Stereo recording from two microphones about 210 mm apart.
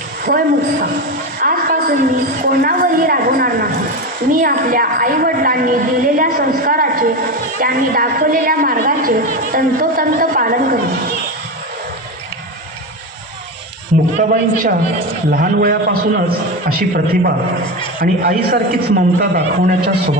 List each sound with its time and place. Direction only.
0.3 s a woman's voice: 45° right (ahead or behind)
14.2 s a man's voice: 40° right (ahead or behind)